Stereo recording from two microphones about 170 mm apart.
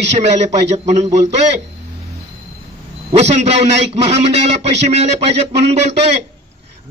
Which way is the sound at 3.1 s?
40° right (ahead or behind).